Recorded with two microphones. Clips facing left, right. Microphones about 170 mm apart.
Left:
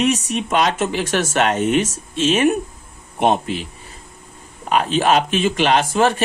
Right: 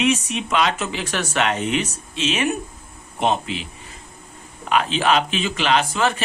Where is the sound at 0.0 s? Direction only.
40° left (ahead or behind).